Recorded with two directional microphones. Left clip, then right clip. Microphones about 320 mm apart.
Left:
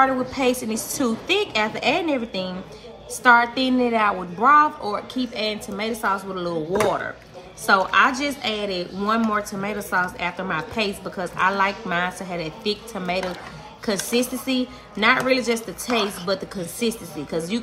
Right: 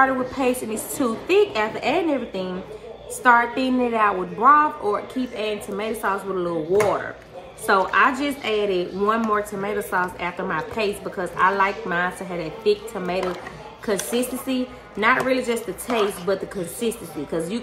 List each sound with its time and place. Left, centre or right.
0.0 s a woman's voice: left
16.8 s a woman's voice: left